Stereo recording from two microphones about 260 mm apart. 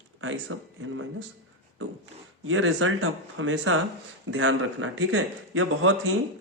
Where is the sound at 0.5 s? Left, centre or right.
Right.